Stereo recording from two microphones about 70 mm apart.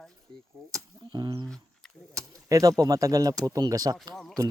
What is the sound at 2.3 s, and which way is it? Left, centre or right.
Speech, right.